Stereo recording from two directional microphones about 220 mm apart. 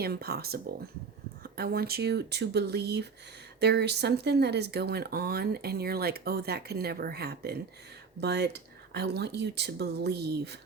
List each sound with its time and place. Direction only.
0.0 s speech: 45° right (ahead or behind)